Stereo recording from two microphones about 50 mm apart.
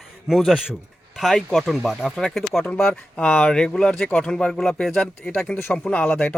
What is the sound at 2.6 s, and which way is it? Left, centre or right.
Speech, centre.